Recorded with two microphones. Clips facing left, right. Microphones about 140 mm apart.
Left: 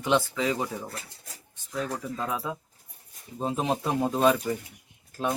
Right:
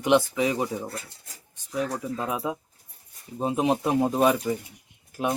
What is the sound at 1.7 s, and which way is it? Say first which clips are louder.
Speech: right 3 dB; 15° right (ahead or behind).